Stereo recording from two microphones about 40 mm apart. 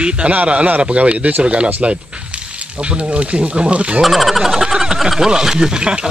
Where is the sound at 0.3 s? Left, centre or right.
Right.